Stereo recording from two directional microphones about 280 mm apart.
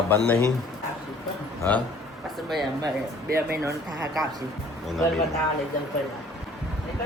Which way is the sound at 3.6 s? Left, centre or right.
Centre.